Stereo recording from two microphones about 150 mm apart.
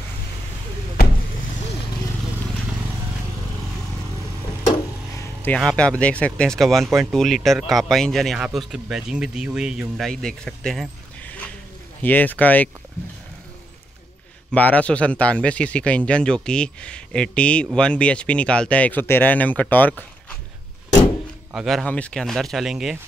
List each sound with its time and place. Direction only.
5.1 s a sound: 15° left (ahead or behind)
5.6 s a man's voice: 5° left (ahead or behind)
14.5 s speech: 10° left (ahead or behind)
21.5 s a man's voice: centre (ahead or behind)